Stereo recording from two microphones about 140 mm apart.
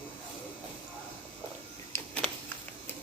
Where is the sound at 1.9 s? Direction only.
20° left (ahead or behind).